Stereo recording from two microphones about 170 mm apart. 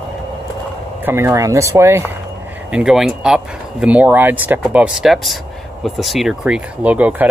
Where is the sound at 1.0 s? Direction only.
15° right (ahead or behind).